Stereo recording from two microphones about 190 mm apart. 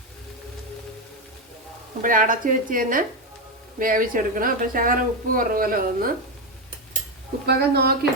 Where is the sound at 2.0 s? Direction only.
45° right (ahead or behind).